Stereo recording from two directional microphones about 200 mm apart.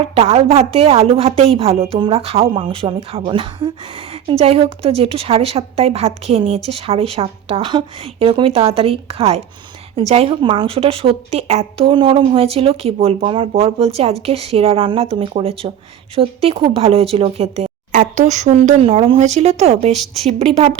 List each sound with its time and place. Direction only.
0.1 s speech: 30° right (ahead or behind)